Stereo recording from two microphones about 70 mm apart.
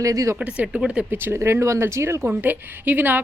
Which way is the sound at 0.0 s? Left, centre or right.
Right.